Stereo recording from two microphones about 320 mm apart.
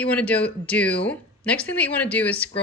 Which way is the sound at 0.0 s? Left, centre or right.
Centre.